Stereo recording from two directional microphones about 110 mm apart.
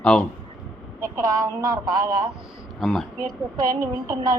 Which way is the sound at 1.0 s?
30° right (ahead or behind).